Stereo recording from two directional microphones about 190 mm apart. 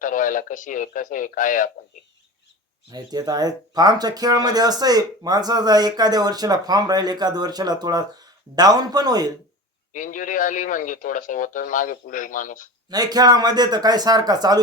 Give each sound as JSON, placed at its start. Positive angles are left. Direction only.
{"t": 0.0, "sound": "speech", "side_deg": 45}
{"t": 2.9, "sound": "speech", "side_deg": -20}
{"t": 9.9, "sound": "speech", "side_deg": 45}
{"t": 12.9, "sound": "speech", "side_deg": -20}